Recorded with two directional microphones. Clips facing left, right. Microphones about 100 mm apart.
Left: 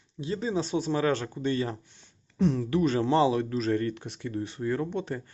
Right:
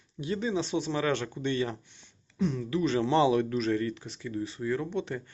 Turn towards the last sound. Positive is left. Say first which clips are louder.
# left 1 dB
turn(degrees=40)  # may be behind; listen again after turning